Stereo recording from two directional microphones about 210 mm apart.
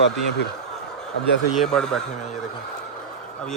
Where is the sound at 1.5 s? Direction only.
Centre (ahead or behind).